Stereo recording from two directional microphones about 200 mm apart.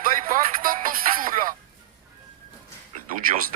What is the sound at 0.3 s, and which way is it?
Music, 45° right (ahead or behind).